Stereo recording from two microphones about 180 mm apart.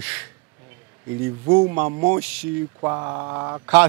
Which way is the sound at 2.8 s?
20° right (ahead or behind).